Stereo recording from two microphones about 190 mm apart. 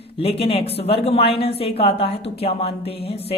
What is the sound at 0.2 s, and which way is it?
A woman's voice, 30° left (ahead or behind).